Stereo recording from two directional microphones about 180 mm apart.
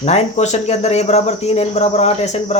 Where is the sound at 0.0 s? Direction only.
35° left (ahead or behind).